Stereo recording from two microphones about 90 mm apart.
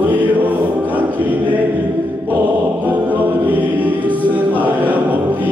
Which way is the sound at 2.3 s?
20° right (ahead or behind).